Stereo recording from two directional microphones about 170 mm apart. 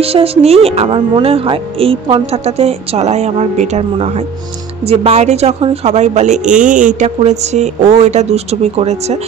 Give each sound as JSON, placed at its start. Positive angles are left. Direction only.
{"t": 0.0, "sound": "speech", "side_deg": -35}